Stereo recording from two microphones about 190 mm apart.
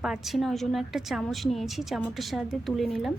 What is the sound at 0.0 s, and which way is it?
A woman's voice, centre (ahead or behind).